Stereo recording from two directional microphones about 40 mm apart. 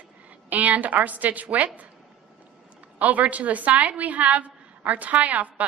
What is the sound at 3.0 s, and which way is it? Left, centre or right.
A woman's voice, right.